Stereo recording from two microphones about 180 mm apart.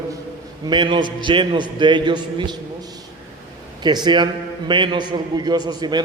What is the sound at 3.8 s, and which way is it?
A man's voice, 25° right (ahead or behind).